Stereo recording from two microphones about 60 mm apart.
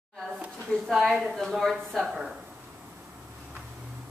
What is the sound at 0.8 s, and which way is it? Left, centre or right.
A woman's voice, centre.